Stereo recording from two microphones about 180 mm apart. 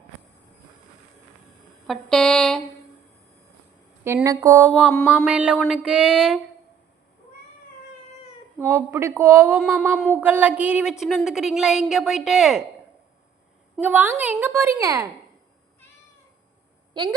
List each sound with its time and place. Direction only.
1.9 s a sound: 5° left (ahead or behind)
4.0 s a woman's voice: 15° right (ahead or behind)
4.7 s a woman's voice: centre (ahead or behind)
8.5 s a woman's voice: 15° right (ahead or behind)
9.6 s a woman's voice: 5° right (ahead or behind)
13.8 s a woman's voice: 10° right (ahead or behind)
16.9 s speech: 25° right (ahead or behind)